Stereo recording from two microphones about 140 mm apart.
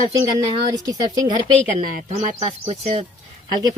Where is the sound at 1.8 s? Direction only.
70° right (ahead or behind).